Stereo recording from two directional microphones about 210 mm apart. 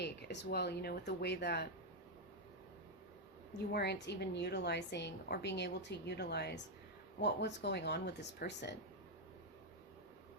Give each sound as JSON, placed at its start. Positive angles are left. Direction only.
{"t": 0.0, "sound": "a woman's voice", "side_deg": 55}
{"t": 3.6, "sound": "a woman's voice", "side_deg": 50}